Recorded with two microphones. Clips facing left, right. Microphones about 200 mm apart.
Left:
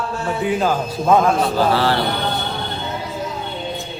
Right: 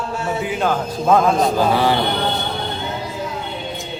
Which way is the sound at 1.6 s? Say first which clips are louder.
Right 1 dB; 15° right (ahead or behind).